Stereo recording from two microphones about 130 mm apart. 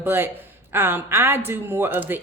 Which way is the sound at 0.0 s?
15° right (ahead or behind).